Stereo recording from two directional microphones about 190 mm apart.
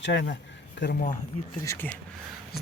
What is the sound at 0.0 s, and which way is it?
Speech, 70° left (ahead or behind).